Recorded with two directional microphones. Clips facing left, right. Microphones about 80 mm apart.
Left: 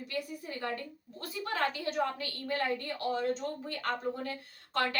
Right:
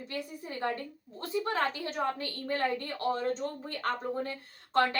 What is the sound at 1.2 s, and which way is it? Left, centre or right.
A woman's voice, right.